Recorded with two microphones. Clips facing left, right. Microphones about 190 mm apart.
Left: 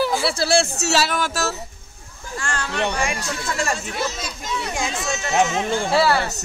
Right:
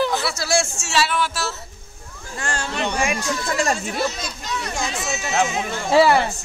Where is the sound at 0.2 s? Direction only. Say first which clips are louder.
Left 3 dB; 30° left (ahead or behind).